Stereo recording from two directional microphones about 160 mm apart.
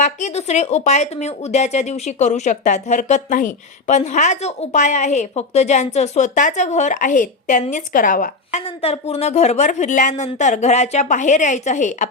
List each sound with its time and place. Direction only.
0.0 s a woman's voice: 45° left (ahead or behind)
8.6 s speech: 40° left (ahead or behind)